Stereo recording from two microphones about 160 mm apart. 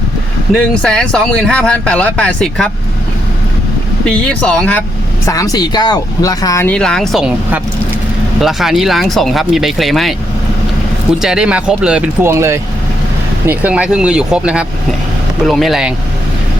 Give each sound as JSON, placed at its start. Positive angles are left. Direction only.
{"t": 0.5, "sound": "speech", "side_deg": 5}
{"t": 4.0, "sound": "speech", "side_deg": 5}
{"t": 5.2, "sound": "speech", "side_deg": 20}
{"t": 6.7, "sound": "speech", "side_deg": 5}
{"t": 11.2, "sound": "speech", "side_deg": -5}